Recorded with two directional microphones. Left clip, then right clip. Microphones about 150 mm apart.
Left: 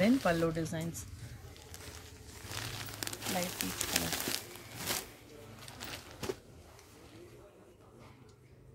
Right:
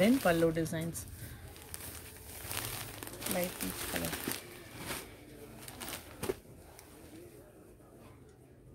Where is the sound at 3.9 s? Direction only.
90° left.